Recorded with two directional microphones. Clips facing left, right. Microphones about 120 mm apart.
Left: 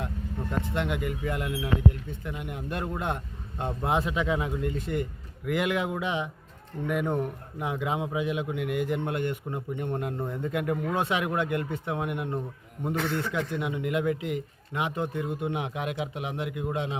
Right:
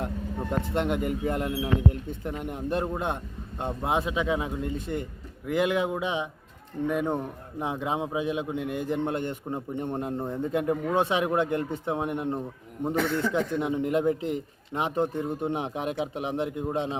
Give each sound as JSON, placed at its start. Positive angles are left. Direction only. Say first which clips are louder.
{"t": 0.7, "sound": "a man's voice", "louder": "right 5 dB", "side_deg": -40}